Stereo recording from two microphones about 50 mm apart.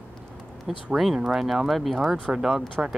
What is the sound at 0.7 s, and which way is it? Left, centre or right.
Speech, centre.